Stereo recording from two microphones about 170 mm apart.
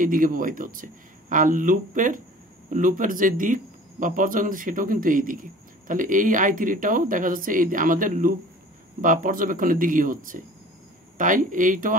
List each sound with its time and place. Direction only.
0.0 s speech: 55° right (ahead or behind)